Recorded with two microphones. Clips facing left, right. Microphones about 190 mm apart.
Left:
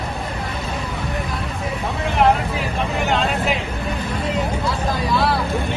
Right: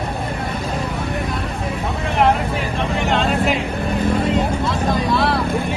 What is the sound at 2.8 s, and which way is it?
Vehicle, centre (ahead or behind).